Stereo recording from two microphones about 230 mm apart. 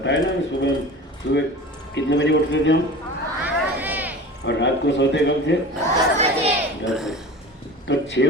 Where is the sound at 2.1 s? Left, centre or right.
Left.